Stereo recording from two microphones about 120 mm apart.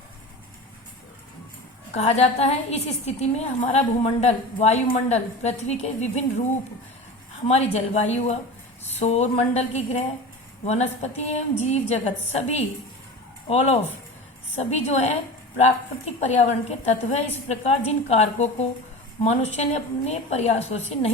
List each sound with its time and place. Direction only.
1.9 s a woman's voice: 60° left (ahead or behind)
7.4 s a woman's voice: 65° left (ahead or behind)